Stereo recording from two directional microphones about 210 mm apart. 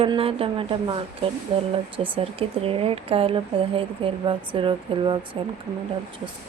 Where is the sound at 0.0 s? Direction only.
25° right (ahead or behind).